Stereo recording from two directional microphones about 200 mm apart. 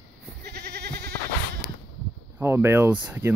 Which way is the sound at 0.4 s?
50° right (ahead or behind).